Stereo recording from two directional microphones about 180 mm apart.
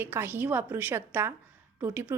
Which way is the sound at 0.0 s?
10° right (ahead or behind).